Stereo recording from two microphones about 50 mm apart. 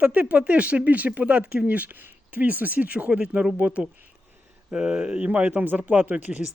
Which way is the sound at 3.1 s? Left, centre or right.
Centre.